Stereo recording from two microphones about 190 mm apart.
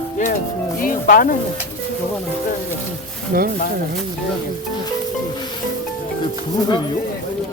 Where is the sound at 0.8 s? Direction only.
45° left (ahead or behind).